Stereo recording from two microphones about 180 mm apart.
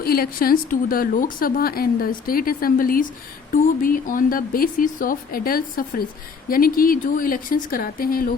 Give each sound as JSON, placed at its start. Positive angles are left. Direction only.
{"t": 0.0, "sound": "speech", "side_deg": 55}